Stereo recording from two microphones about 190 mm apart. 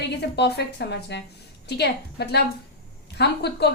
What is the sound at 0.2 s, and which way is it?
A woman's voice, 60° left (ahead or behind).